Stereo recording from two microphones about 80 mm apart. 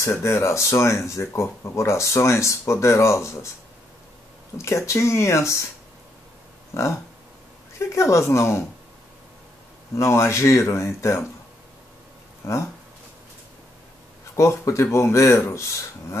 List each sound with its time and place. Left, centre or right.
0.0 s speech: left
4.6 s speech: left
6.7 s a sound: left
7.9 s speech: left
9.9 s speech: left
12.4 s speech: left
14.3 s speech: left